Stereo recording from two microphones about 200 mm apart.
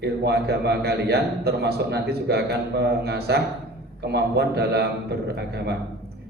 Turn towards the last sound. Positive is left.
turn(degrees=-55)  # may be behind; listen again after turning